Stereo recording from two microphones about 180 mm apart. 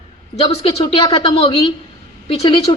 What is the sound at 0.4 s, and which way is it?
A man's voice, 20° left (ahead or behind).